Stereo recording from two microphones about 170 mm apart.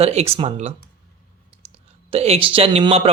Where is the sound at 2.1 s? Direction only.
35° right (ahead or behind).